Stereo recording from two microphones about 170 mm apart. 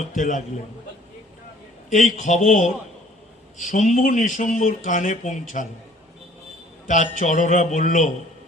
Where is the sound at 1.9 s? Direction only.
45° left (ahead or behind).